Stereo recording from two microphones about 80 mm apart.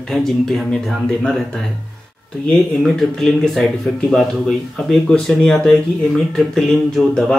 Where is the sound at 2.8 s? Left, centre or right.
Centre.